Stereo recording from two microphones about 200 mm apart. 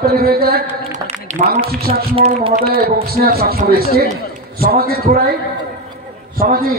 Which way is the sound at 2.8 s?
50° right (ahead or behind).